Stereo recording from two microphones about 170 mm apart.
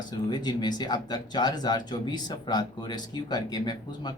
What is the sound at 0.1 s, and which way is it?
Speech, 25° left (ahead or behind).